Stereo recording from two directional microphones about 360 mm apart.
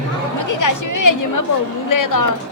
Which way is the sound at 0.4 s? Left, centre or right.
Left.